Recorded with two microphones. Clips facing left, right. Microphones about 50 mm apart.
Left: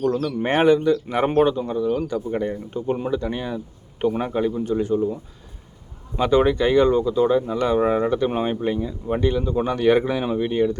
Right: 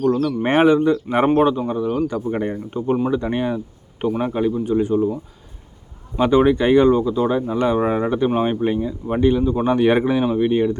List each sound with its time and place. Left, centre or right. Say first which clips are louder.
0.0 s speech: right 3 dB; centre; by 3.6 s right
4.0 s speech: right 1 dB; centre
6.1 s speech: right 3 dB; centre
9.6 s speech: right 2 dB; right